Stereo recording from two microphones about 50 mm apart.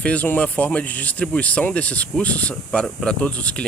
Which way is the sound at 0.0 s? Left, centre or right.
Left.